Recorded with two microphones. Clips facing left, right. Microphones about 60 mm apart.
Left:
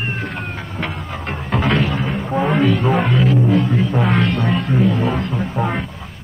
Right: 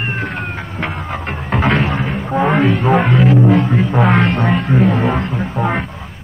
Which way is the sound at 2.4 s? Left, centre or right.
Right.